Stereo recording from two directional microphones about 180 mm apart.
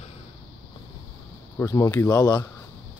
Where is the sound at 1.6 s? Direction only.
20° left (ahead or behind).